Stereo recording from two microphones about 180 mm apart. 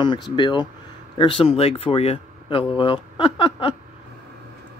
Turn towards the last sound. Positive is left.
turn(degrees=30)  # may be behind; listen again after turning